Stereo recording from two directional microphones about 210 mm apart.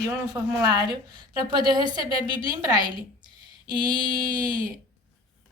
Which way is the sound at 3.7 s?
20° right (ahead or behind).